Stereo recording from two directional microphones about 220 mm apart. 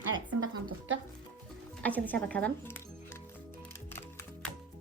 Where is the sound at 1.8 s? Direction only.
5° left (ahead or behind).